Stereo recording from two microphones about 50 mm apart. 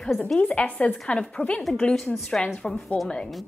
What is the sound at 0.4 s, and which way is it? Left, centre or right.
A woman's voice, left.